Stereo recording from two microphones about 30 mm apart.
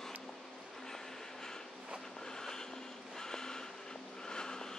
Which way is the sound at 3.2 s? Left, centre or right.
Centre.